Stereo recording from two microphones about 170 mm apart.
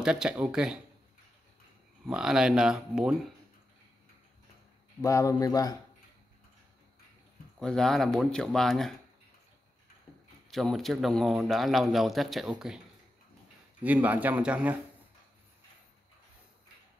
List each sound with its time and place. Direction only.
0.0 s speech: 5° right (ahead or behind)
2.0 s speech: 5° right (ahead or behind)
5.0 s a man's voice: 20° left (ahead or behind)
7.5 s speech: 5° left (ahead or behind)
10.1 s a sound: 10° left (ahead or behind)
10.5 s speech: centre (ahead or behind)
13.8 s speech: 10° right (ahead or behind)